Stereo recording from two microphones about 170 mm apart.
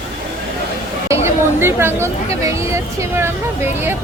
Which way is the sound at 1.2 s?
15° right (ahead or behind).